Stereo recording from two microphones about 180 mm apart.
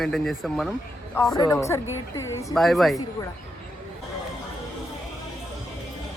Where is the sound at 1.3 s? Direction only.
20° left (ahead or behind).